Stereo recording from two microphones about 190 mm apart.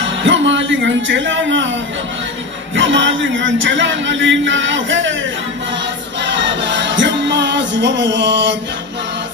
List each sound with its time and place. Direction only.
0.0 s speech: 75° right (ahead or behind)
2.7 s speech: 75° right (ahead or behind)
6.2 s music: 70° right (ahead or behind)